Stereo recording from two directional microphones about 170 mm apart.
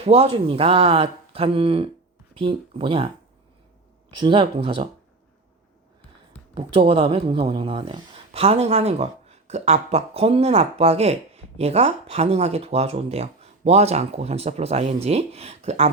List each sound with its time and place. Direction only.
0.0 s speech: 35° right (ahead or behind)
4.1 s speech: 30° right (ahead or behind)
6.5 s speech: 30° right (ahead or behind)